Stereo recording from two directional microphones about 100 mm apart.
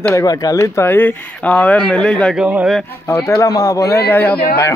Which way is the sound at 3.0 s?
25° left (ahead or behind).